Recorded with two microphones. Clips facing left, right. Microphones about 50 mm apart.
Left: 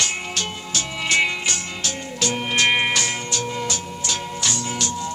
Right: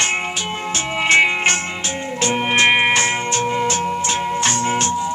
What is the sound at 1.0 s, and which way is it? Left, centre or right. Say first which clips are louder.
Music: right 6 dB; right.